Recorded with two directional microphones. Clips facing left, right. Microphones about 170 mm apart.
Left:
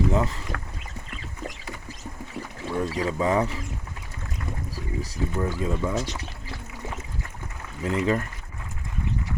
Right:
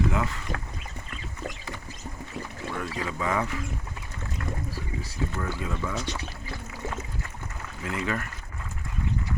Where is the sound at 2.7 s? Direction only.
35° left (ahead or behind).